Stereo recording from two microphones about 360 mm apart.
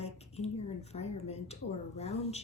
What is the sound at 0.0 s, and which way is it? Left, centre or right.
Speech, centre.